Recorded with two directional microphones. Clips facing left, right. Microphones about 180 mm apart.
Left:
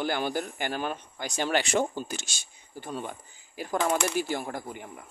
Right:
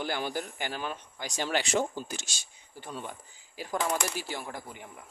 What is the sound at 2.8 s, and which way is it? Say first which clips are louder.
Speech: left 4 dB; 50° left (ahead or behind).